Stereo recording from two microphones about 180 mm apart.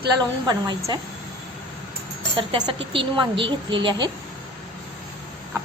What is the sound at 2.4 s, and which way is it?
Speech, 30° right (ahead or behind).